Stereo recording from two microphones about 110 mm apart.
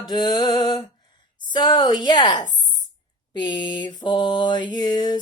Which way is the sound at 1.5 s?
45° left (ahead or behind).